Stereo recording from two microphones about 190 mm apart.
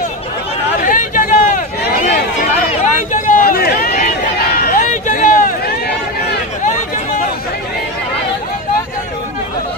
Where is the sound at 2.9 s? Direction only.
45° left (ahead or behind).